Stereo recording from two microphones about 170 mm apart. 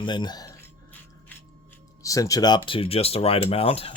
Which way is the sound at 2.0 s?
20° left (ahead or behind).